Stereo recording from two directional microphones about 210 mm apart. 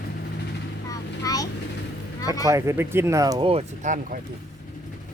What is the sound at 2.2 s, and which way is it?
Speech, 15° left (ahead or behind).